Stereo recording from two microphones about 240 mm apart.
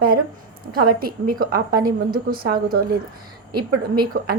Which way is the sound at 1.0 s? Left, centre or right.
Right.